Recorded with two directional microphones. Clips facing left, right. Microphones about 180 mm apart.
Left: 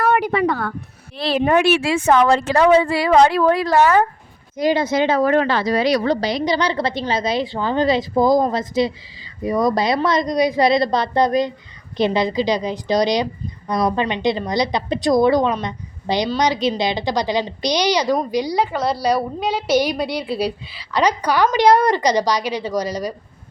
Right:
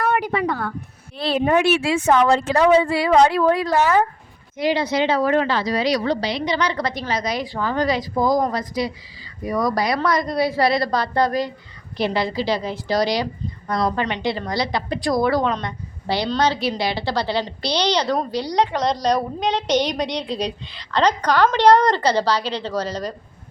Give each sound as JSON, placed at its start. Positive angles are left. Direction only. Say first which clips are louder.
{"t": 0.0, "sound": "a sound", "louder": "left 3 dB", "side_deg": 70}
{"t": 1.1, "sound": "speech", "louder": "left 2 dB", "side_deg": 90}
{"t": 4.5, "sound": "a woman's voice", "louder": "left 3 dB", "side_deg": 45}